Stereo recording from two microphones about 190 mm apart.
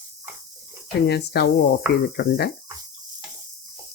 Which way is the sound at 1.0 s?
60° left (ahead or behind).